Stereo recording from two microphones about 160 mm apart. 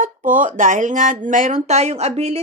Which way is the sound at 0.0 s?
55° right (ahead or behind).